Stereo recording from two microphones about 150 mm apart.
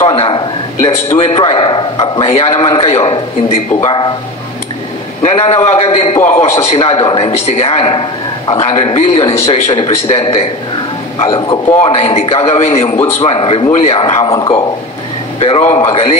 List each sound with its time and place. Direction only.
0.1 s a man's voice: 35° left (ahead or behind)
5.2 s a man's voice: 40° left (ahead or behind)
6.2 s a man's voice: 50° left (ahead or behind); by 11.6 s 30° left (ahead or behind)
11.8 s a man's voice: 45° left (ahead or behind)
15.3 s a man's voice: 40° left (ahead or behind)